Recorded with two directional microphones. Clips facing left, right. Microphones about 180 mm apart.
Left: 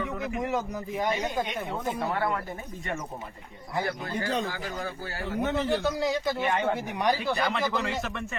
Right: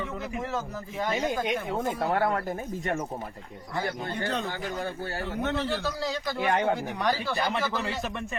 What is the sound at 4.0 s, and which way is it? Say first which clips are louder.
Speech: even; 25° right (ahead or behind).